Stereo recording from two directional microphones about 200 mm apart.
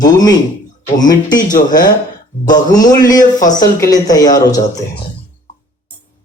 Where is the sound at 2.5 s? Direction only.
20° left (ahead or behind).